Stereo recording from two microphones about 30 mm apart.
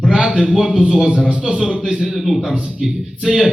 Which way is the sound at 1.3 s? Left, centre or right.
Right.